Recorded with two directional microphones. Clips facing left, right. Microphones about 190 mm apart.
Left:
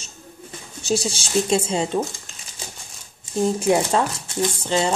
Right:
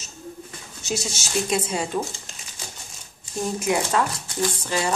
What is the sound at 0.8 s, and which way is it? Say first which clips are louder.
Speech: left 6 dB; 30° left (ahead or behind).